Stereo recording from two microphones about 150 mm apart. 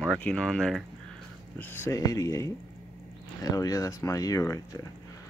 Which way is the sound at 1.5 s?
15° left (ahead or behind).